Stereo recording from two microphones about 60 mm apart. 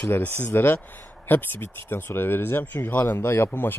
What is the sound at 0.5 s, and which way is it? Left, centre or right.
Speech, left.